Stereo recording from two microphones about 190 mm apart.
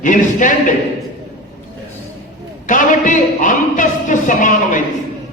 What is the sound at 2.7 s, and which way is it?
Speech, 45° left (ahead or behind).